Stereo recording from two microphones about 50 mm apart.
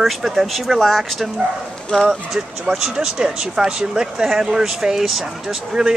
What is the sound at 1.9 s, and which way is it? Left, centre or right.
Speech, centre.